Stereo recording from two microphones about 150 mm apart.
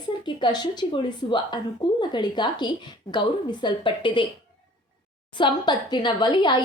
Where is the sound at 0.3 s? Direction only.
30° left (ahead or behind).